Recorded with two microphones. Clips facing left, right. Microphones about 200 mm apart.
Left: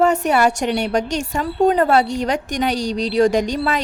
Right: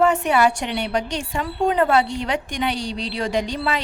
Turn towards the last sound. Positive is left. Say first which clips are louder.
# left 4 dB
turn(degrees=45)  # may be behind; listen again after turning